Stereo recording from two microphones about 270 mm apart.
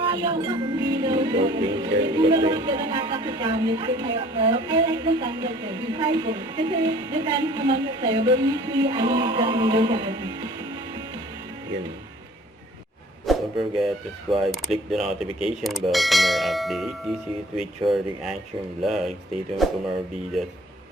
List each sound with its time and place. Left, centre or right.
0.0 s speech: centre
13.2 s a sound: centre
14.4 s bell: centre
17.8 s speech: centre
18.8 s bell: centre